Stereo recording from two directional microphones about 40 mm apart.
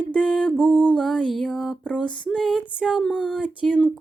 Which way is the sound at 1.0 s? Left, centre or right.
Left.